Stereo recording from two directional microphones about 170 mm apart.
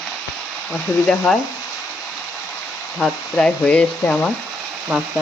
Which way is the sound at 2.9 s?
Centre (ahead or behind).